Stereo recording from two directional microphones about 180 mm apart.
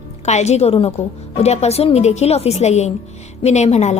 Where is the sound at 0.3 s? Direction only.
40° left (ahead or behind).